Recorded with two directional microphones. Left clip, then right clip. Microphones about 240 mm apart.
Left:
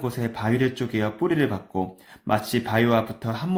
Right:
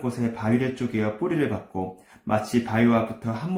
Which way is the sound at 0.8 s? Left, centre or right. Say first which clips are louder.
Left 1 dB; left.